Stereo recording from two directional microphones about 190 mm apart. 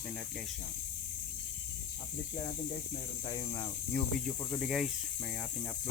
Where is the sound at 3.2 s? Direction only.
25° left (ahead or behind).